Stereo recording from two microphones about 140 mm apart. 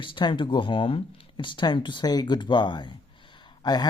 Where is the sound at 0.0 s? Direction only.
35° left (ahead or behind).